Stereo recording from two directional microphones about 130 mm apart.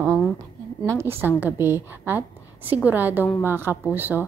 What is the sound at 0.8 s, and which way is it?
A woman's voice, 20° right (ahead or behind).